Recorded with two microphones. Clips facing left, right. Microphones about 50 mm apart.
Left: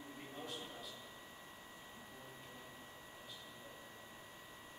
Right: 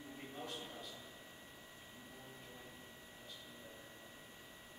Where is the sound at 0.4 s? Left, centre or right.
Centre.